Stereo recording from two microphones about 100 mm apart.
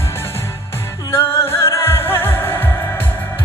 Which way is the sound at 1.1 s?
25° left (ahead or behind).